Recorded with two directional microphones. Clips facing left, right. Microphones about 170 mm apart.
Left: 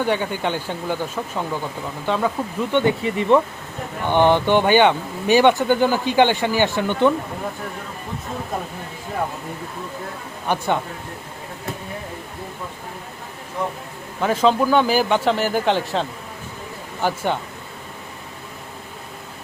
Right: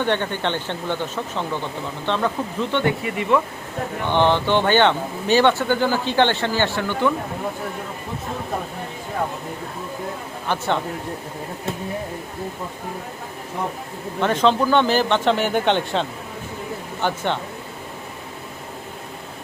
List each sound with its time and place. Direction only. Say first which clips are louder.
0.0 s speech: left 1 dB; 10° left (ahead or behind)
2.8 s speech: left 3 dB; 30° left (ahead or behind)
4.1 s speech: left 3 dB; 15° left (ahead or behind)
10.5 s speech: left 2 dB; 15° left (ahead or behind)
14.2 s a man's voice: left 1 dB; 5° left (ahead or behind)